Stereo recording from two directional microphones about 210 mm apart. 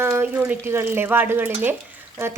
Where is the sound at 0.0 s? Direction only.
10° right (ahead or behind).